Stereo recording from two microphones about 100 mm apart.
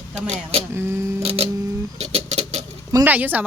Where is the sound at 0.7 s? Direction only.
25° right (ahead or behind).